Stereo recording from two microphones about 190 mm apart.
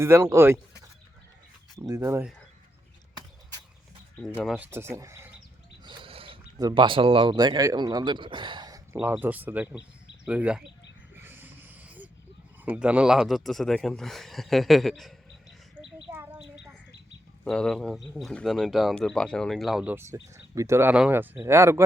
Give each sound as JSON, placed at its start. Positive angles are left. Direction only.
{"t": 0.0, "sound": "speech", "side_deg": -15}
{"t": 1.8, "sound": "speech", "side_deg": -15}
{"t": 4.2, "sound": "speech", "side_deg": 0}
{"t": 5.8, "sound": "speech", "side_deg": -25}
{"t": 11.1, "sound": "a sound", "side_deg": -10}
{"t": 12.6, "sound": "speech", "side_deg": -5}
{"t": 15.7, "sound": "bird", "side_deg": -10}
{"t": 17.4, "sound": "speech", "side_deg": 5}